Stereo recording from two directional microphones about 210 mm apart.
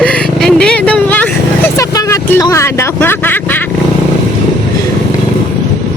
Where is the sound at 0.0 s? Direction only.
5° left (ahead or behind).